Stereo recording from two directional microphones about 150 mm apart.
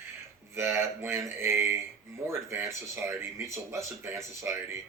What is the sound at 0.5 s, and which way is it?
Speech, 15° right (ahead or behind).